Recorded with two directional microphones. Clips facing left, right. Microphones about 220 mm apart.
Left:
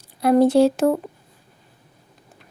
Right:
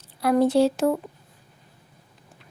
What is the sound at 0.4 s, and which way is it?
Speech, 45° left (ahead or behind).